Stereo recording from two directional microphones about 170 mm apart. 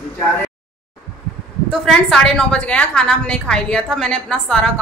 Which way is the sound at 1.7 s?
5° left (ahead or behind).